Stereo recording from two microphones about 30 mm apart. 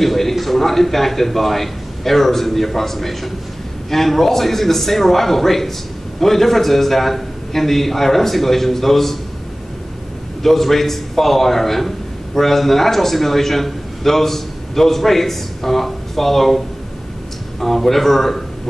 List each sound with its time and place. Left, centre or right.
0.0 s a man's voice: centre
10.4 s a man's voice: centre